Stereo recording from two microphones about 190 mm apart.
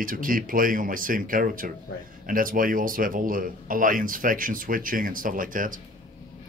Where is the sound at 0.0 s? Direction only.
45° right (ahead or behind).